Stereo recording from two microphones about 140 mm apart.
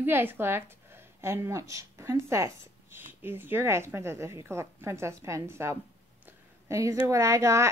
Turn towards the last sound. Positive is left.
turn(degrees=-20)  # may be behind; listen again after turning